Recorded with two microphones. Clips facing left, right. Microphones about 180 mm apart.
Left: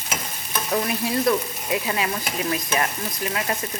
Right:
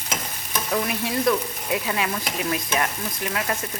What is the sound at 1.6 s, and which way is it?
Stir, 5° left (ahead or behind).